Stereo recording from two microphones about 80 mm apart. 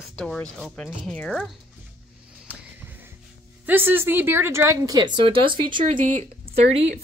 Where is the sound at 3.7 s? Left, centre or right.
Right.